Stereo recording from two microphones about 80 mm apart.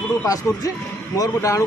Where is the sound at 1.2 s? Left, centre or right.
Left.